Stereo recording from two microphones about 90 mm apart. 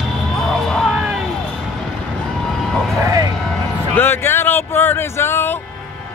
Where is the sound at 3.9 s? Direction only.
25° left (ahead or behind).